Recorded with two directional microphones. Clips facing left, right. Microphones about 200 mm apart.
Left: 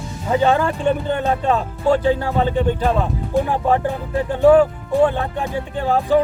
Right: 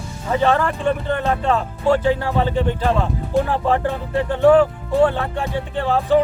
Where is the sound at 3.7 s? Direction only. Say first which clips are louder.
Left 1 dB; 10° left (ahead or behind).